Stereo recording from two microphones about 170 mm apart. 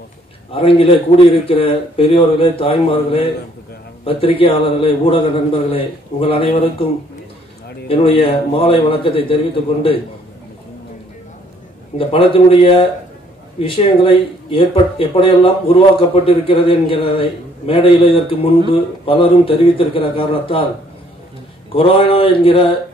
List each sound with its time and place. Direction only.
0.5 s a man's voice: 30° left (ahead or behind)
7.9 s a man's voice: 35° left (ahead or behind)
12.0 s a man's voice: 35° left (ahead or behind)
21.7 s a man's voice: 30° left (ahead or behind)